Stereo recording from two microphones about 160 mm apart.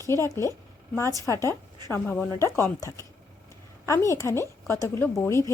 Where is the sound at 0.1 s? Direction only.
20° left (ahead or behind).